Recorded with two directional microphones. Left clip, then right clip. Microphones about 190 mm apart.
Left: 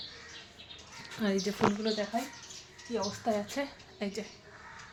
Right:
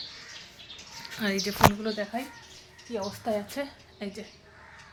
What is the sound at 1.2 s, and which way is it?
A woman's voice, centre (ahead or behind).